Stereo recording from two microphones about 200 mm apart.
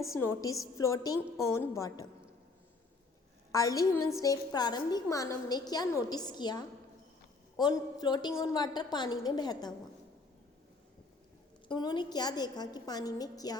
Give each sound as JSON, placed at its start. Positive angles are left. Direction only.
{"t": 0.2, "sound": "a woman's voice", "side_deg": 15}
{"t": 3.5, "sound": "a woman's voice", "side_deg": 15}
{"t": 11.7, "sound": "a woman's voice", "side_deg": 20}